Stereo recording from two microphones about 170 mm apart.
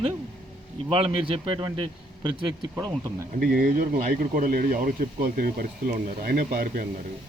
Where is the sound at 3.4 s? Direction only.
55° right (ahead or behind).